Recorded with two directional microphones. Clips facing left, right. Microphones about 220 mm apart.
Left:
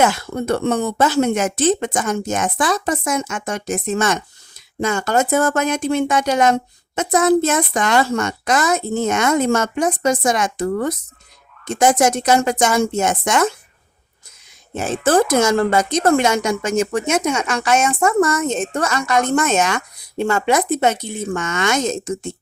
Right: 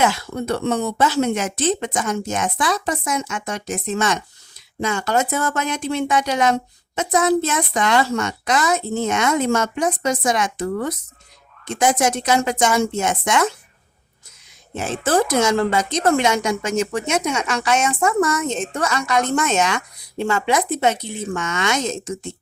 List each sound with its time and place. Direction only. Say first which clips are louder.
0.0 s speech: left 3 dB; 50° left (ahead or behind)
14.8 s speech: left 3 dB; 45° left (ahead or behind)